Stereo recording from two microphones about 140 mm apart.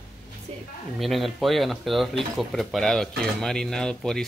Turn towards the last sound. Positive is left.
turn(degrees=5)  # may be behind; listen again after turning